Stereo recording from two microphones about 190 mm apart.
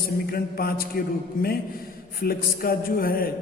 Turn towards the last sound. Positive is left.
turn(degrees=50)  # may be behind; listen again after turning